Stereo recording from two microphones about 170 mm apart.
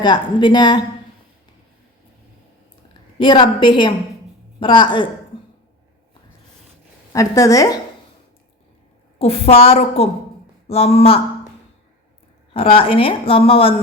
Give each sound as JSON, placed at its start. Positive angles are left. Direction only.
{"t": 0.0, "sound": "a woman's voice", "side_deg": 25}
{"t": 3.2, "sound": "a woman's voice", "side_deg": 30}
{"t": 7.1, "sound": "a woman's voice", "side_deg": 20}
{"t": 9.1, "sound": "a woman's voice", "side_deg": 35}
{"t": 12.5, "sound": "a woman's voice", "side_deg": 30}